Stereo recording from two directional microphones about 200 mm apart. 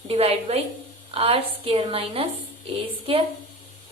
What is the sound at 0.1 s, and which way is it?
A woman's voice, 30° right (ahead or behind).